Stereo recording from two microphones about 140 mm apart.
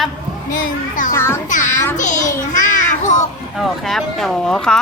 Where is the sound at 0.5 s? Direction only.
65° left (ahead or behind).